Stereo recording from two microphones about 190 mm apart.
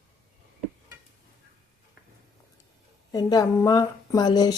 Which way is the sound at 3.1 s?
20° left (ahead or behind).